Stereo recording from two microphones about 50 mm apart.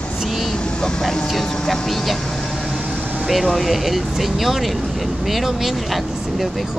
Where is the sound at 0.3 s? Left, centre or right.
Centre.